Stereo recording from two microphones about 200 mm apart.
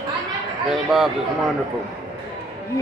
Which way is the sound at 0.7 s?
Centre (ahead or behind).